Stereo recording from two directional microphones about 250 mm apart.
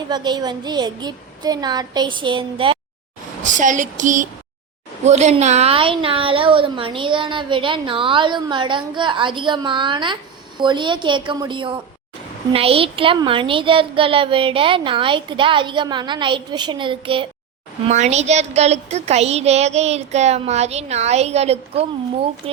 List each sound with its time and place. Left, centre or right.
0.1 s a child's voice: centre
3.4 s a sound: right
5.0 s a woman's voice: right